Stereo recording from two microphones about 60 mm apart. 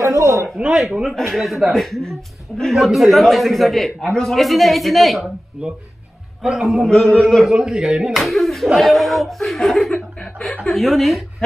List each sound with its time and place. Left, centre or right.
0.0 s a sound: right
1.1 s a man's voice: centre
6.4 s a man's voice: centre
6.9 s speech: centre
7.4 s a man's voice: centre
9.9 s speech: left
10.6 s a man's voice: centre